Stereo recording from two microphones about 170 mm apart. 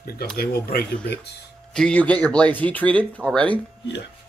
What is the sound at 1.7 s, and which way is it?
Speech, 5° left (ahead or behind).